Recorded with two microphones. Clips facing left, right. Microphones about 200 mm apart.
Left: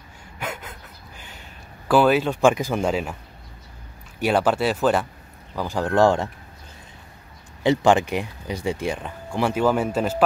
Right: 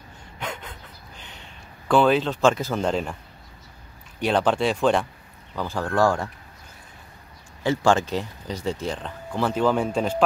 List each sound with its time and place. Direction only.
0.4 s a sound: 5° left (ahead or behind)
4.2 s speech: 5° left (ahead or behind)
5.6 s speech: 15° left (ahead or behind)
7.6 s speech: 20° left (ahead or behind)